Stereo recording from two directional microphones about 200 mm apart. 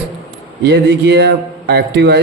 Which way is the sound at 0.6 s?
55° right (ahead or behind).